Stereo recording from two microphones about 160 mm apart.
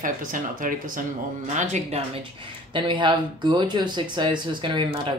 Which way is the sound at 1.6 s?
45° right (ahead or behind).